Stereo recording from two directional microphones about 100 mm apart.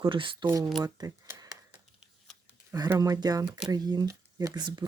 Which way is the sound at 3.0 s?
40° right (ahead or behind).